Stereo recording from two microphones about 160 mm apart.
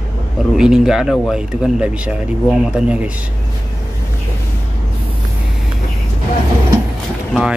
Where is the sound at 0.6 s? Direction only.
5° right (ahead or behind).